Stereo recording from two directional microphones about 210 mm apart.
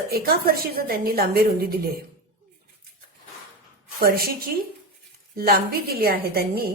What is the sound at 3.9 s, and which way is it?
A woman's voice, 45° right (ahead or behind).